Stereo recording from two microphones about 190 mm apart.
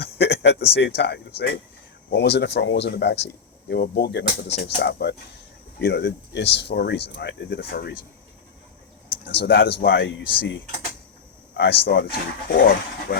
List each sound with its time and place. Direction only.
0.0 s speech: 60° left (ahead or behind)
9.0 s speech: 60° left (ahead or behind)
11.5 s speech: 65° left (ahead or behind)